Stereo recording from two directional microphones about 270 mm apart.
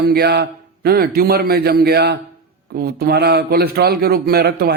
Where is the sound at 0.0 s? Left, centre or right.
Right.